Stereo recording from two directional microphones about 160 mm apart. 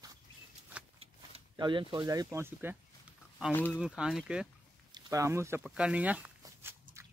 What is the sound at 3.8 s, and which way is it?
Speech, 5° right (ahead or behind).